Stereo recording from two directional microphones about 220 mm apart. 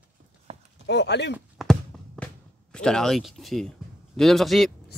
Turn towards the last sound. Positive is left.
turn(degrees=0)  # may be behind; listen again after turning